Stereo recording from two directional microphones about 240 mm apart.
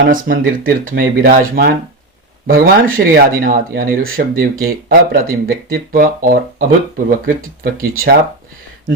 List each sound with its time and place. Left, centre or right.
0.1 s speech: right